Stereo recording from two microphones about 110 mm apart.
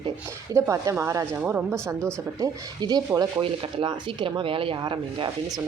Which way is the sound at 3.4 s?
50° right (ahead or behind).